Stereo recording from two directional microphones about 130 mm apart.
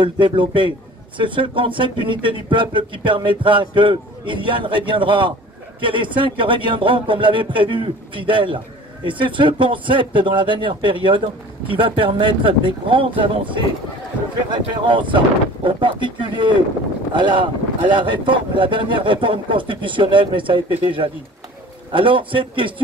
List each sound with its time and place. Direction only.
0.0 s speech: 40° right (ahead or behind)